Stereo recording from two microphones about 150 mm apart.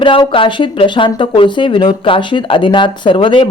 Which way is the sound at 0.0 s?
35° left (ahead or behind).